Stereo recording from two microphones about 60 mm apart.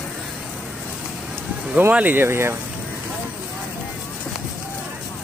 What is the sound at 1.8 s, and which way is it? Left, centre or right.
Speech, right.